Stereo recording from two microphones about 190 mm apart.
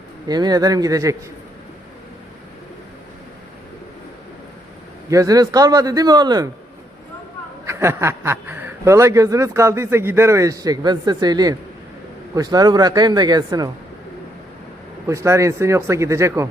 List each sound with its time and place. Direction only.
0.3 s a man's voice: 20° right (ahead or behind)
5.0 s a man's voice: 15° right (ahead or behind)
7.7 s a man's voice: 15° right (ahead or behind)
15.0 s speech: 15° right (ahead or behind)